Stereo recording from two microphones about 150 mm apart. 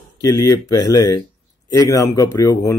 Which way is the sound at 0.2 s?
25° left (ahead or behind).